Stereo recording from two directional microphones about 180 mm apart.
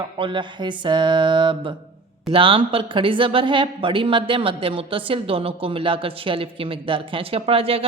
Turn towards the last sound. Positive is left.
turn(degrees=-30)  # may be behind; listen again after turning